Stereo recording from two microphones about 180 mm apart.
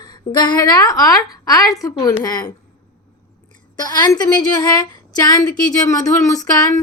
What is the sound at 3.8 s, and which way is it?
A woman's voice, 20° left (ahead or behind).